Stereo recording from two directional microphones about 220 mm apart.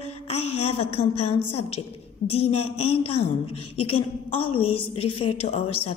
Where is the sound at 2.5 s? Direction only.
30° left (ahead or behind).